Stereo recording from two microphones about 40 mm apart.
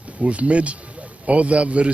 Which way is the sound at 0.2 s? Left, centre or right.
Right.